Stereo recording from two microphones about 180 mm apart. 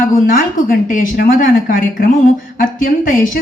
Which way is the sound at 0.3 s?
50° left (ahead or behind).